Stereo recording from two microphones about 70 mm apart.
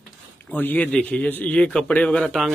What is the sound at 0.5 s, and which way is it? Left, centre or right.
A man's voice, left.